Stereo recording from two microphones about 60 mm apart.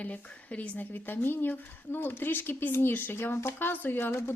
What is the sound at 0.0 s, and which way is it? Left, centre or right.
Speech, left.